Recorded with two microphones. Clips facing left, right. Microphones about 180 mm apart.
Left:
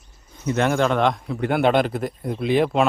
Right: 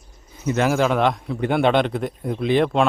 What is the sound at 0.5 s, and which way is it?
A man's voice, 5° right (ahead or behind).